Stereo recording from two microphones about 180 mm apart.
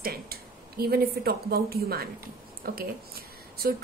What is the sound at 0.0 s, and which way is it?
A woman's voice, 55° right (ahead or behind).